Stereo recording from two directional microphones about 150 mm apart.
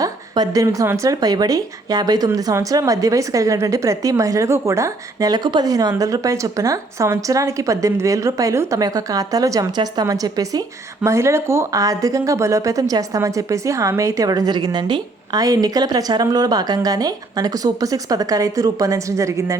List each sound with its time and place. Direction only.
0.0 s speech: 25° right (ahead or behind)